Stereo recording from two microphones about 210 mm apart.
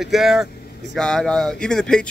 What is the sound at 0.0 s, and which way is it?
Speech, centre (ahead or behind).